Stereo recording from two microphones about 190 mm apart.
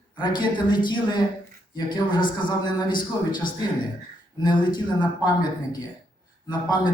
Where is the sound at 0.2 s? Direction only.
25° left (ahead or behind).